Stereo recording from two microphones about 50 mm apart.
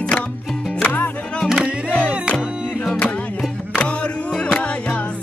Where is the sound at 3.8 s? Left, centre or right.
Left.